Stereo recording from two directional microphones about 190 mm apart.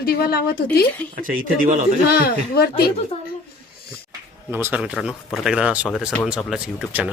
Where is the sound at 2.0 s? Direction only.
55° left (ahead or behind).